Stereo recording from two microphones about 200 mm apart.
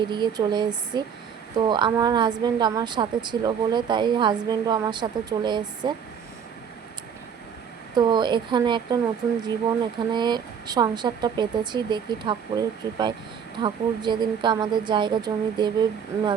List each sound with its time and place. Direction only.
0.1 s a woman's voice: 20° right (ahead or behind)
7.9 s a woman's voice: 20° right (ahead or behind)
10.1 s a woman's voice: 20° right (ahead or behind)